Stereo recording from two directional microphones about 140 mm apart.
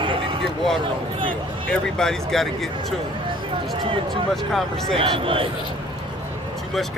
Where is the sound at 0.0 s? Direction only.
40° right (ahead or behind).